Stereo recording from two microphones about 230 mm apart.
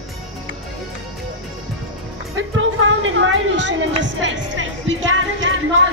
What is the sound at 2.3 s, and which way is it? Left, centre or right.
Music, right.